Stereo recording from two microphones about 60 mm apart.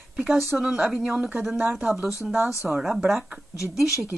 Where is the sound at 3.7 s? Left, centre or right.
Centre.